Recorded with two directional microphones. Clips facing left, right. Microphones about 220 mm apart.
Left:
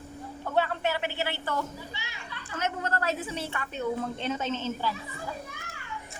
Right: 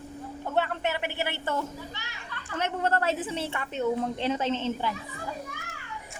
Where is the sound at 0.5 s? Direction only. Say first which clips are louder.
Left 1 dB; 20° right (ahead or behind).